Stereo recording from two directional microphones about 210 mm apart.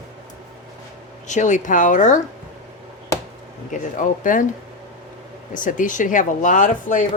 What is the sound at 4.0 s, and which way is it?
Speech, 40° left (ahead or behind).